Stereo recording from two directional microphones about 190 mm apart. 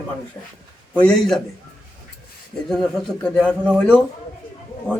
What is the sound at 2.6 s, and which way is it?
A man's voice, 5° left (ahead or behind).